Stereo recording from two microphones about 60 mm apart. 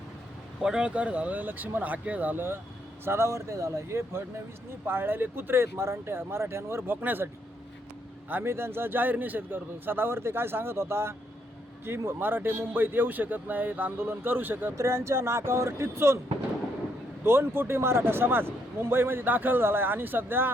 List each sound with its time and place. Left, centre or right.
0.6 s speech: centre
3.0 s speech: right
4.9 s a man's voice: right
8.3 s a man's voice: right
14.8 s speech: right
17.2 s a man's voice: right